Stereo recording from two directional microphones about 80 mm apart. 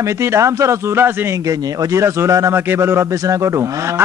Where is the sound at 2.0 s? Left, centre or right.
Right.